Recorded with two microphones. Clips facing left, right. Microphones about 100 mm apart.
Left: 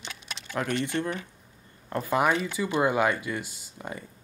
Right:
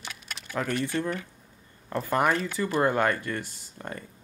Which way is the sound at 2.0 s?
10° left (ahead or behind).